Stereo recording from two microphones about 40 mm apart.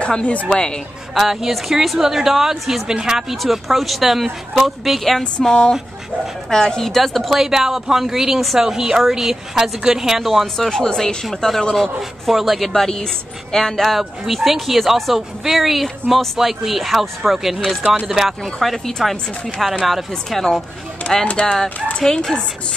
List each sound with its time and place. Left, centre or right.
0.0 s a woman's voice: left
1.1 s speech: centre
5.4 s speech: centre
10.6 s a woman's voice: centre
12.3 s speech: centre
13.9 s speech: centre
18.4 s speech: centre
21.0 s speech: left
22.0 s speech: centre